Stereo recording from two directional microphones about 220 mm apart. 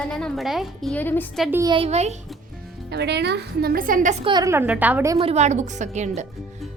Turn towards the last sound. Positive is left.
turn(degrees=-30)  # may be behind; listen again after turning